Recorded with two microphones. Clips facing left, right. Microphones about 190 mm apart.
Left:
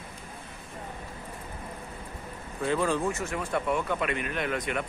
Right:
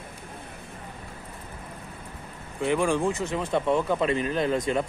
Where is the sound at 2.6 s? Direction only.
15° right (ahead or behind).